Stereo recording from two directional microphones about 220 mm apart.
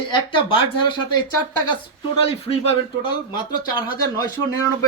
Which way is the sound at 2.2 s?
25° left (ahead or behind).